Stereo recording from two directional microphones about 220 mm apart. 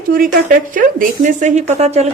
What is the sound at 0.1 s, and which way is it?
Speech, 40° right (ahead or behind).